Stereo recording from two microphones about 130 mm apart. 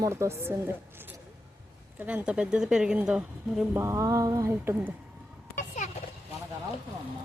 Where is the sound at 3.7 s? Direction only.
20° right (ahead or behind).